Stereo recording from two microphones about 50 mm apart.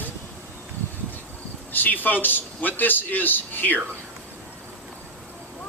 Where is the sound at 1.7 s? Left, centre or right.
Left.